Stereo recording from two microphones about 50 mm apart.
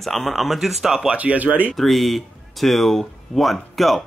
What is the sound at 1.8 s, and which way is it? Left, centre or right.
Speech, centre.